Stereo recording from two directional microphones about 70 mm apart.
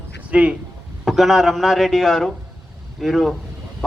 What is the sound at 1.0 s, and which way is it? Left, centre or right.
Speech, centre.